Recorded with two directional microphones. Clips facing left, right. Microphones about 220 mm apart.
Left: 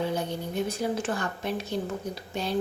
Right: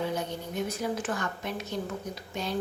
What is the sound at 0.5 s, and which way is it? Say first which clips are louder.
A woman's voice: left 2 dB; 30° left (ahead or behind).